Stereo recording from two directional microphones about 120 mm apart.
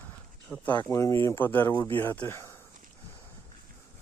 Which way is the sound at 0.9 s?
25° left (ahead or behind).